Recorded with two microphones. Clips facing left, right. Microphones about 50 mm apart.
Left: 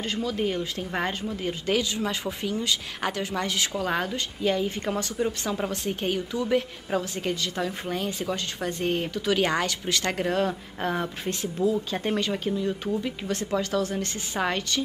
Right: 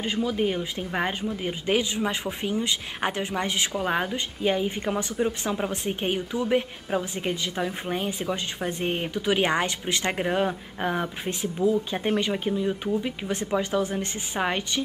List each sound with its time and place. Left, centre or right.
0.0 s speech: centre